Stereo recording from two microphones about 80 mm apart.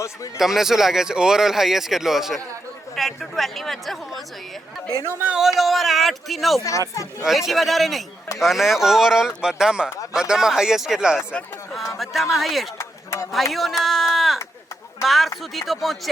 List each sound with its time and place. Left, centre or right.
0.3 s speech: centre
5.0 s speech: right
5.3 s speech: centre
6.7 s speech: left
7.3 s speech: centre
12.8 s a sound: left
13.3 s speech: centre